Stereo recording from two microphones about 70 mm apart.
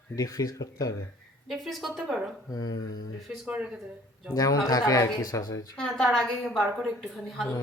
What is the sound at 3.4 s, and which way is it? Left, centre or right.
Speech, centre.